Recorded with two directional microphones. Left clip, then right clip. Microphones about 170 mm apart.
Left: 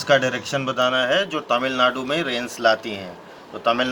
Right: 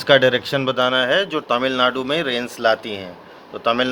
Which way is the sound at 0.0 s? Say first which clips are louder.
Right 4 dB; 45° right (ahead or behind).